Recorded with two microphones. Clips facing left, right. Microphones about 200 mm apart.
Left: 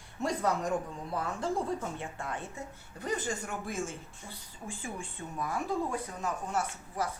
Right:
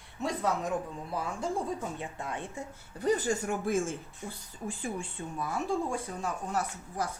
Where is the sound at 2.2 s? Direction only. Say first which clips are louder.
Right 1 dB; 20° right (ahead or behind).